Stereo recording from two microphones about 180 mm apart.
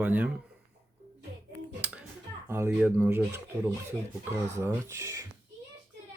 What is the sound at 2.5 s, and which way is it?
Speech, 15° right (ahead or behind).